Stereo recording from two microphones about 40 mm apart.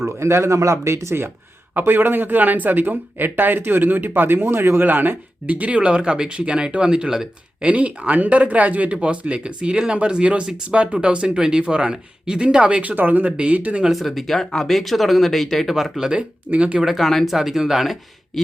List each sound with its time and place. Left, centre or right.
0.0 s a man's voice: right
1.7 s a man's voice: right
4.8 s a man's voice: right
5.5 s speech: right; by 7.2 s centre
7.6 s speech: right
13.0 s a man's voice: right
13.3 s speech: right
13.9 s speech: centre
15.7 s speech: centre
16.6 s speech: right
16.8 s speech: centre